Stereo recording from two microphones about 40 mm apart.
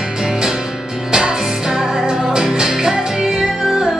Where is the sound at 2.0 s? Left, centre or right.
Centre.